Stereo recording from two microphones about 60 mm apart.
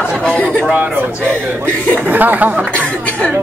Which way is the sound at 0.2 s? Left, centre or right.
Centre.